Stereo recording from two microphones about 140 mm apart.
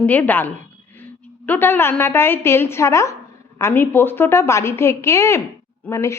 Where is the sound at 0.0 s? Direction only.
10° left (ahead or behind).